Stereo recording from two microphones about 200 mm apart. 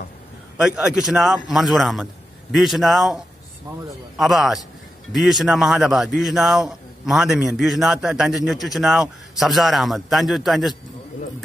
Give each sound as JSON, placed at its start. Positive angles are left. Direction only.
{"t": 0.6, "sound": "a man's voice", "side_deg": -5}
{"t": 4.2, "sound": "a man's voice", "side_deg": 0}